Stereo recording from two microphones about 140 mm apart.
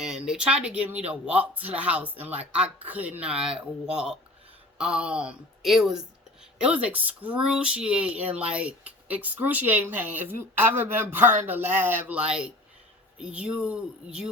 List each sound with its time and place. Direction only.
0.0 s speech: 5° right (ahead or behind)